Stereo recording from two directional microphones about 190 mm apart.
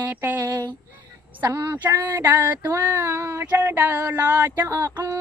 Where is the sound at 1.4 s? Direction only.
10° right (ahead or behind).